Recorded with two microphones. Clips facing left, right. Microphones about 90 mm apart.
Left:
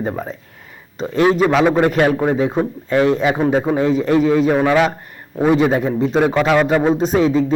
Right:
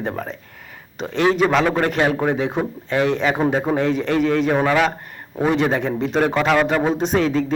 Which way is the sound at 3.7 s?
10° left (ahead or behind).